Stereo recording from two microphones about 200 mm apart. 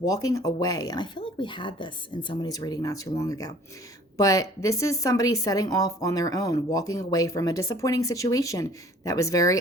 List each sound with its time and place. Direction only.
0.0 s speech: 15° left (ahead or behind)